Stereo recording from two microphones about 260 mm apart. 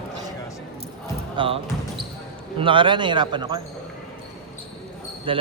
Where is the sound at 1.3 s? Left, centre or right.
Centre.